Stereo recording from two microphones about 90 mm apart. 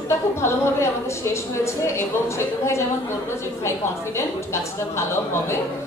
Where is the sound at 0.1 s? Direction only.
30° left (ahead or behind).